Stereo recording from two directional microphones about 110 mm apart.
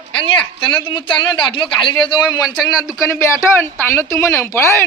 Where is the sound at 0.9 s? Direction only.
45° left (ahead or behind).